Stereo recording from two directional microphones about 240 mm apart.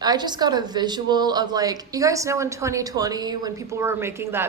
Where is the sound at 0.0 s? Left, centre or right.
Centre.